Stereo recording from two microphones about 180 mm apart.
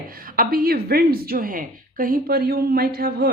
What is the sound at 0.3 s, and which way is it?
Speech, 55° right (ahead or behind).